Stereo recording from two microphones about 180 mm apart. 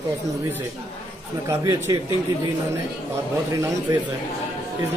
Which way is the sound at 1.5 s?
20° right (ahead or behind).